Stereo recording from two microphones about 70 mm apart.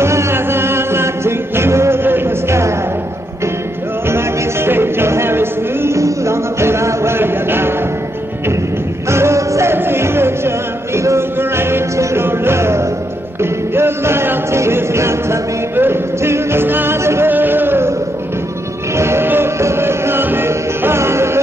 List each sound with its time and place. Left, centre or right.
0.0 s music: right
4.1 s music: right
9.1 s music: right
17.3 s a sound: right
18.9 s music: right